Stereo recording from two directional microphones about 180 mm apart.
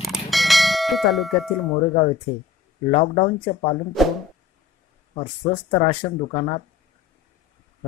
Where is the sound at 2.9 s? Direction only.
40° left (ahead or behind).